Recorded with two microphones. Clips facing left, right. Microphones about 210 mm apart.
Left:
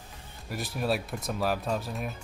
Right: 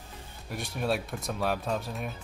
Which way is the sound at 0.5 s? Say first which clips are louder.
Left 1 dB; centre (ahead or behind).